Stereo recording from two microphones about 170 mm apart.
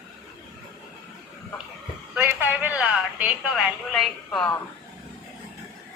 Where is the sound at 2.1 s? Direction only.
10° right (ahead or behind).